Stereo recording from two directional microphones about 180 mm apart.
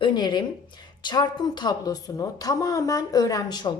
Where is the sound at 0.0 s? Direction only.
25° left (ahead or behind).